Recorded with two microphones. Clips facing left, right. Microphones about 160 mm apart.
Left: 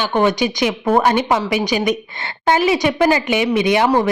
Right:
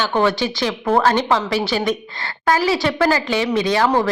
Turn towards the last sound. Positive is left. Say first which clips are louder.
# left 2 dB
turn(degrees=15)  # may be behind; listen again after turning